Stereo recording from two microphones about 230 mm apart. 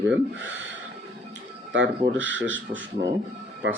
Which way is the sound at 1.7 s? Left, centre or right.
Right.